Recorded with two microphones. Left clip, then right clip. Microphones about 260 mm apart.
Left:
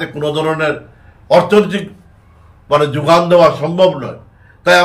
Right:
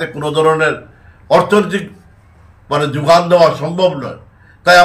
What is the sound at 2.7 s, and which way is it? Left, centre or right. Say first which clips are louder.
Speech: even; centre.